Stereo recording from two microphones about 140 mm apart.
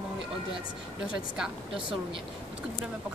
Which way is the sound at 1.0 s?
5° right (ahead or behind).